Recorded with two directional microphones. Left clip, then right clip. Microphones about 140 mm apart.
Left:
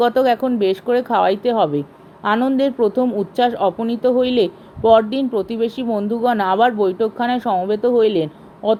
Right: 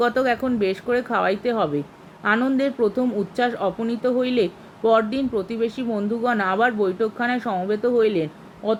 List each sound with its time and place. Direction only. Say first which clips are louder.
0.0 s speech: left 5 dB; 30° left (ahead or behind)